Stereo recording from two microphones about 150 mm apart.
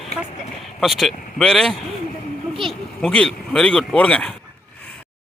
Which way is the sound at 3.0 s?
5° left (ahead or behind).